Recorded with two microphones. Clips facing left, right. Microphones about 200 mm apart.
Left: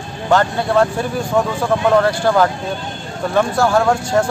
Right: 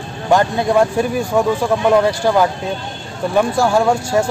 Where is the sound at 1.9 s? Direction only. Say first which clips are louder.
Even; 15° right (ahead or behind).